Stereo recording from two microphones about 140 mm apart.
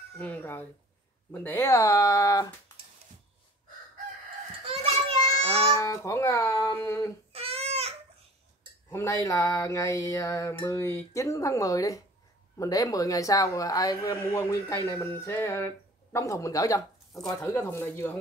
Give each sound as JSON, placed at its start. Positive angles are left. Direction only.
{"t": 0.2, "sound": "speech", "side_deg": 10}
{"t": 1.3, "sound": "mantra", "side_deg": 15}
{"t": 4.6, "sound": "child singing", "side_deg": -45}
{"t": 5.8, "sound": "music", "side_deg": 20}
{"t": 7.3, "sound": "babbling", "side_deg": -45}
{"t": 8.9, "sound": "mantra", "side_deg": 25}
{"t": 14.9, "sound": "speech", "side_deg": 20}
{"t": 17.4, "sound": "mantra", "side_deg": 20}